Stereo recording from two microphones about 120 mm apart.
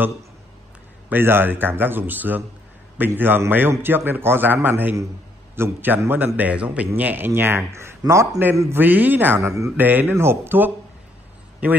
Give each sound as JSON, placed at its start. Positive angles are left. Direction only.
{"t": 1.0, "sound": "a man's voice", "side_deg": -15}